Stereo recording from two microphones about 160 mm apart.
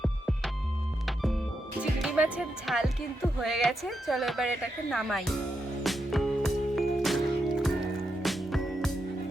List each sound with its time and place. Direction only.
0.0 s music: centre (ahead or behind)
1.8 s speech: 5° right (ahead or behind)
5.8 s music: centre (ahead or behind)